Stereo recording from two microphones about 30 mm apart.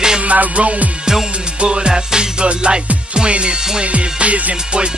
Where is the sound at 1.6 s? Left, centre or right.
Right.